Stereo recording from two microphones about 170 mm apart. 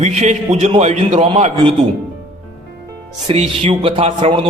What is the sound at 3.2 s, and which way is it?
A man's voice, 30° right (ahead or behind).